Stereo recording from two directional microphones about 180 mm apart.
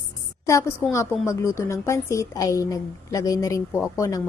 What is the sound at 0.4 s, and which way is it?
A woman's voice, 15° left (ahead or behind).